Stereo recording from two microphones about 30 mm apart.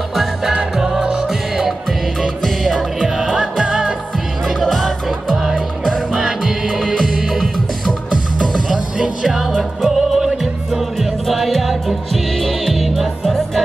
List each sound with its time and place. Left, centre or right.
0.5 s music: centre
2.2 s music: centre
3.2 s music: centre
4.6 s music: centre
5.3 s music: centre
7.2 s music: centre
8.7 s music: right
9.2 s music: centre
10.7 s music: centre